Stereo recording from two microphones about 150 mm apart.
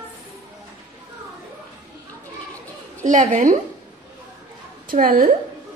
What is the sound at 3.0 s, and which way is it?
Speech, 55° right (ahead or behind).